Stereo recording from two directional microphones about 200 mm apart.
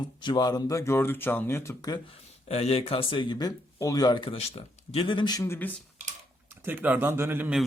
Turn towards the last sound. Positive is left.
turn(degrees=-10)  # may be behind; listen again after turning